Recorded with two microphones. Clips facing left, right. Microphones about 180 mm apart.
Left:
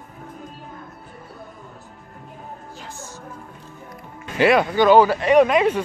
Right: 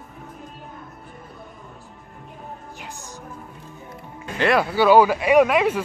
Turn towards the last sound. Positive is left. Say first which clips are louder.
# left 1 dB
turn(degrees=-5)  # may be behind; listen again after turning